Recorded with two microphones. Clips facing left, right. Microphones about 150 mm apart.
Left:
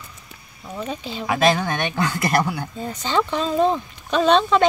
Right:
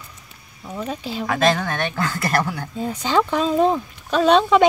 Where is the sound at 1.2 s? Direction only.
10° left (ahead or behind).